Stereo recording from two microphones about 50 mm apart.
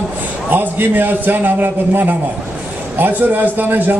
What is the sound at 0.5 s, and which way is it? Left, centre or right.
A man's voice, right.